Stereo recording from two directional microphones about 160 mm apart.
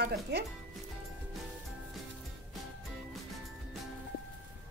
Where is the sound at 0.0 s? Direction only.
90° right.